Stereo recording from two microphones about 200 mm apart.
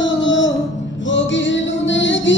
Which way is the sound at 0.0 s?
65° left (ahead or behind).